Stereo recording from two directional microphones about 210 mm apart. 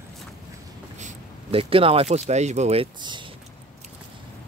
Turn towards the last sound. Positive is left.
turn(degrees=-20)  # may be behind; listen again after turning